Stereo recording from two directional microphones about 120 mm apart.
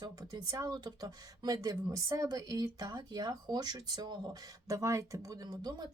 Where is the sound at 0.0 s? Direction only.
35° right (ahead or behind).